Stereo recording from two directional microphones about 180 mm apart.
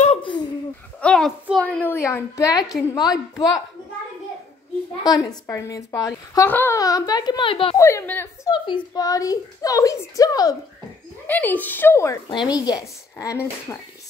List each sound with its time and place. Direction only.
0.0 s a sound: 30° left (ahead or behind)
1.0 s a woman's voice: 5° left (ahead or behind); by 3.6 s 20° left (ahead or behind)
5.0 s speech: 20° left (ahead or behind)
7.7 s a woman's voice: 15° left (ahead or behind)
11.2 s a woman's voice: 10° left (ahead or behind)